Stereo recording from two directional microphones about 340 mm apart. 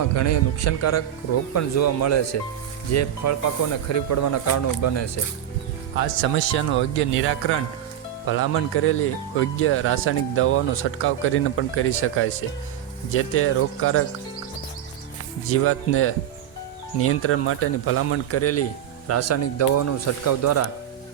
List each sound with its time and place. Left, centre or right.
0.0 s speech: left
6.2 s speech: left
15.4 s speech: left